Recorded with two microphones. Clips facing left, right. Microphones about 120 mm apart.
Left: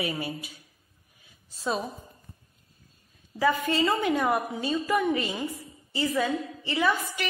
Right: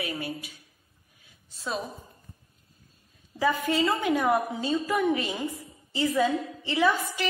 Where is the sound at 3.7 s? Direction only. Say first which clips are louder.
Even; 10° right (ahead or behind).